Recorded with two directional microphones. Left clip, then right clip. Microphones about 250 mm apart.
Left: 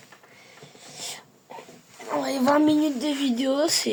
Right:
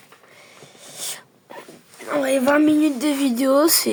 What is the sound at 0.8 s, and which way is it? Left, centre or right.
Dog, right.